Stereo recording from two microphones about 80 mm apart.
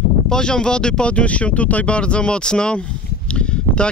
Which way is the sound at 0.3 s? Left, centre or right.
Centre.